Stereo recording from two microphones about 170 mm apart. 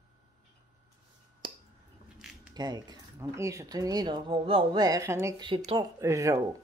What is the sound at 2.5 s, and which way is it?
Speech, 25° right (ahead or behind).